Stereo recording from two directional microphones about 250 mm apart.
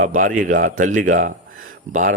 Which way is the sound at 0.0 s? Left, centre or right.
Right.